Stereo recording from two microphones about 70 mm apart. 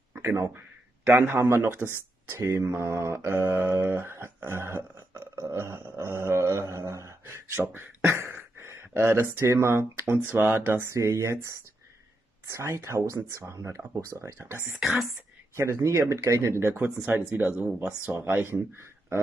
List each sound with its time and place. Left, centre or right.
1.0 s speech: right
4.5 s a sound: right
5.3 s dog: right
7.7 s speech: right
16.7 s speech: right